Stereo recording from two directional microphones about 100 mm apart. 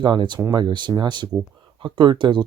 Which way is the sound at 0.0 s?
50° right (ahead or behind).